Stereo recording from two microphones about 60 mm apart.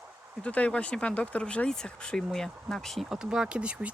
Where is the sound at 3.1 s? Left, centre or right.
Centre.